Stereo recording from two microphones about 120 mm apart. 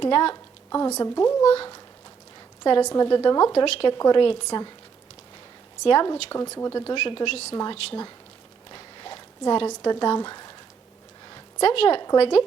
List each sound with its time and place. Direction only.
0.0 s a woman's voice: 45° left (ahead or behind)
0.7 s speech: 30° left (ahead or behind)
2.8 s a woman's voice: 30° left (ahead or behind)
3.5 s a woman's voice: 50° left (ahead or behind)
5.8 s a woman's voice: 40° left (ahead or behind)
6.3 s speech: 25° left (ahead or behind)
6.9 s a woman's voice: 45° left (ahead or behind)
7.5 s a woman's voice: 30° left (ahead or behind)
8.7 s a sound: 40° left (ahead or behind)
11.6 s a woman's voice: 50° left (ahead or behind)